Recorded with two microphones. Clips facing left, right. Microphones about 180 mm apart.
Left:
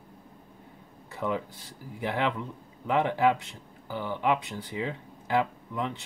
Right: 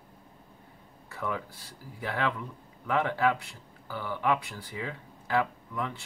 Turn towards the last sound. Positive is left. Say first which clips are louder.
# left 2 dB
turn(degrees=20)  # may be behind; listen again after turning